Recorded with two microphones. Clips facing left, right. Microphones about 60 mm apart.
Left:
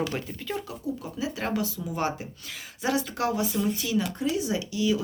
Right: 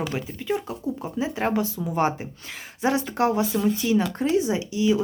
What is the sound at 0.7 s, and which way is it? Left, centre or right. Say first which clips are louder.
Speech: right 4 dB; right.